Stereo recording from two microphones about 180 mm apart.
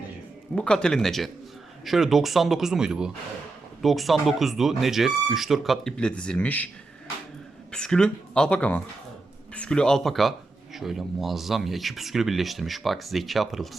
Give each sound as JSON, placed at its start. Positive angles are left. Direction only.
{"t": 0.5, "sound": "speech", "side_deg": 5}
{"t": 7.7, "sound": "speech", "side_deg": 5}